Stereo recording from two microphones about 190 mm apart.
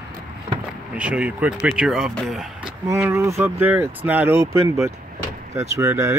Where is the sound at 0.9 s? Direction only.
5° right (ahead or behind).